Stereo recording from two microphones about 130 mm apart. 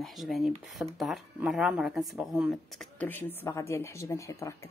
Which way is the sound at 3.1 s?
15° left (ahead or behind).